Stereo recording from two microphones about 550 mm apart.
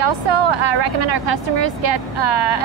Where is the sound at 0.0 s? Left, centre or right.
Right.